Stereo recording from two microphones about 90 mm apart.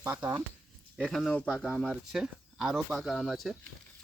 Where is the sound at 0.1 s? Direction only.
30° right (ahead or behind).